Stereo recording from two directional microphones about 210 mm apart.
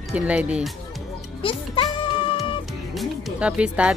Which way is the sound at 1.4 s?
25° left (ahead or behind).